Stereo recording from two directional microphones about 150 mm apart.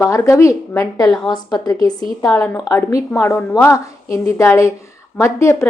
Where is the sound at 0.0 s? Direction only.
20° left (ahead or behind).